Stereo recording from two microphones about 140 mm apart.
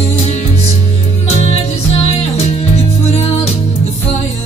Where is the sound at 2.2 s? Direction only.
50° left (ahead or behind).